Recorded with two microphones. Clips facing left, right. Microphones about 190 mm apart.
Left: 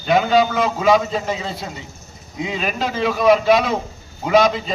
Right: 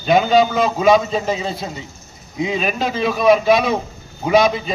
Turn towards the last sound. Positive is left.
turn(degrees=-15)  # may be behind; listen again after turning